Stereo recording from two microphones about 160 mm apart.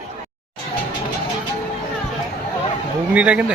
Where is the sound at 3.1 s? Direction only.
10° right (ahead or behind).